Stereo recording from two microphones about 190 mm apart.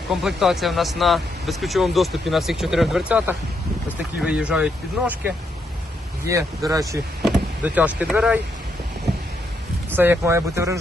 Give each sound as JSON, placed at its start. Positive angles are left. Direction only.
{"t": 0.1, "sound": "speech", "side_deg": 0}
{"t": 6.2, "sound": "speech", "side_deg": -15}
{"t": 7.2, "sound": "speech", "side_deg": 0}
{"t": 9.9, "sound": "speech", "side_deg": -10}